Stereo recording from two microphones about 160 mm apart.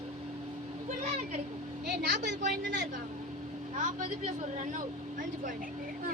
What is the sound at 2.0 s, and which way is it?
Speech, 70° right (ahead or behind).